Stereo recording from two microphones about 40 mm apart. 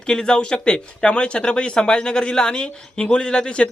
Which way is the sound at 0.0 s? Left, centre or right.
Centre.